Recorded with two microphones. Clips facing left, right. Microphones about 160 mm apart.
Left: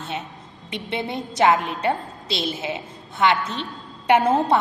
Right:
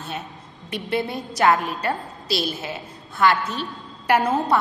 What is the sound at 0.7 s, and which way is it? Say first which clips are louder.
A woman's voice: right 2 dB; 25° left (ahead or behind).